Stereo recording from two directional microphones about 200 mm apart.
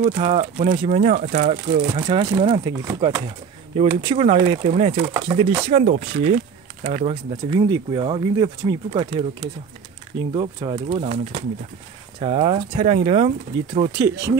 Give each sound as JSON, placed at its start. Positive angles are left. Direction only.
{"t": 0.0, "sound": "speech", "side_deg": -30}
{"t": 10.3, "sound": "speech", "side_deg": -25}